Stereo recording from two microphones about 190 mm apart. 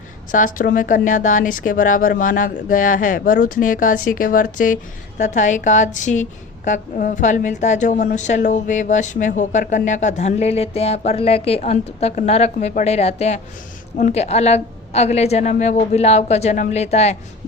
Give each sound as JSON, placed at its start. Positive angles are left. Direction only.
{"t": 0.3, "sound": "a woman's voice", "side_deg": 45}